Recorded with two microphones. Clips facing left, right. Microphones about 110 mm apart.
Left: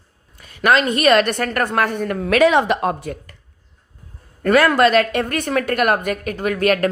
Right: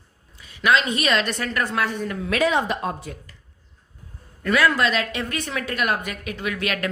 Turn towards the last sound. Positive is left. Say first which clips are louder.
# left 9 dB
turn(degrees=45)  # may be behind; listen again after turning